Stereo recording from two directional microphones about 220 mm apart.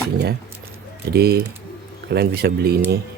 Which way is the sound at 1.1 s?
45° right (ahead or behind).